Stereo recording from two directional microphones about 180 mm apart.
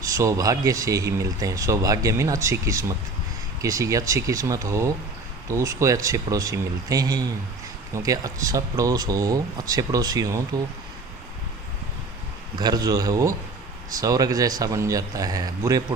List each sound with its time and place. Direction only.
0.0 s speech: 20° right (ahead or behind)
12.5 s speech: 20° right (ahead or behind)